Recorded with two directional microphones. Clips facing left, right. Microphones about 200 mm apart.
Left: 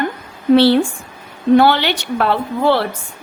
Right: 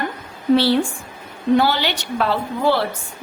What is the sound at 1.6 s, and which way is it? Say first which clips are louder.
A woman's voice: left 5 dB; 60° left (ahead or behind).